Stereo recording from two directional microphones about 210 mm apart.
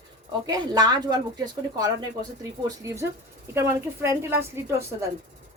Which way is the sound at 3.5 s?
10° right (ahead or behind).